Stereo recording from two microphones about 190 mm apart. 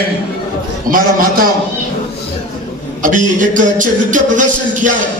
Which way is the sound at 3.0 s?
45° right (ahead or behind).